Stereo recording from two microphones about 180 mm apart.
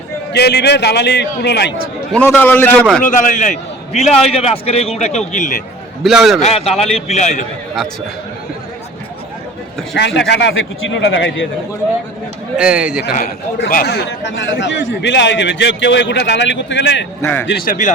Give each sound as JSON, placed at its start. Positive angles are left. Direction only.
{"t": 0.3, "sound": "a man's voice", "side_deg": 65}
{"t": 2.1, "sound": "a man's voice", "side_deg": 10}
{"t": 3.0, "sound": "a man's voice", "side_deg": 45}
{"t": 6.0, "sound": "a man's voice", "side_deg": 0}
{"t": 6.4, "sound": "a man's voice", "side_deg": 35}
{"t": 10.2, "sound": "speech", "side_deg": 80}
{"t": 12.5, "sound": "a man's voice", "side_deg": -5}
{"t": 13.1, "sound": "a man's voice", "side_deg": 50}
{"t": 17.7, "sound": "a man's voice", "side_deg": 45}